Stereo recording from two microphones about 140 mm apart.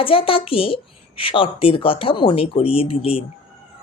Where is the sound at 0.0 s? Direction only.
40° left (ahead or behind).